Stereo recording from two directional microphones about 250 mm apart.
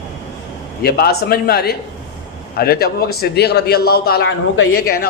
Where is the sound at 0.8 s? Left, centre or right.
Left.